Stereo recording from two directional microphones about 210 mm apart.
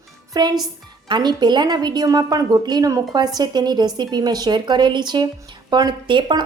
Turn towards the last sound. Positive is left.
turn(degrees=-20)  # may be behind; listen again after turning